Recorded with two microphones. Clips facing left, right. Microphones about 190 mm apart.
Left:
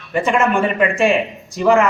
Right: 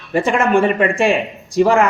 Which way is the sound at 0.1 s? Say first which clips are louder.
Right 2 dB; 30° right (ahead or behind).